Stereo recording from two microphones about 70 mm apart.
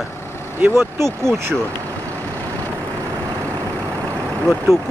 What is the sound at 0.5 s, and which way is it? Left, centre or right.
Speech, right.